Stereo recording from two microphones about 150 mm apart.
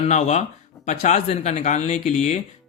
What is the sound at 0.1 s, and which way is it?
Speech, 50° left (ahead or behind).